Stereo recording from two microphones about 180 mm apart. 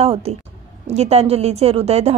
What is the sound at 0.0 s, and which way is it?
A woman's voice, 35° right (ahead or behind).